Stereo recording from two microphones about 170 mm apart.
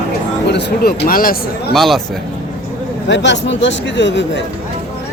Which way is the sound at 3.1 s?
90° left.